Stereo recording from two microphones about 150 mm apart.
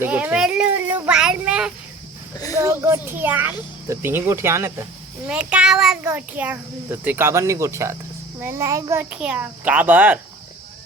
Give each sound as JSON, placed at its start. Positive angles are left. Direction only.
{"t": 0.0, "sound": "a child's voice", "side_deg": -10}
{"t": 2.3, "sound": "speech", "side_deg": 25}
{"t": 2.6, "sound": "a child's voice", "side_deg": -20}